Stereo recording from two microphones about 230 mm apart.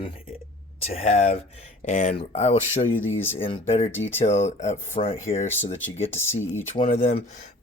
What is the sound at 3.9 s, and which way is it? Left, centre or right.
Speech, centre.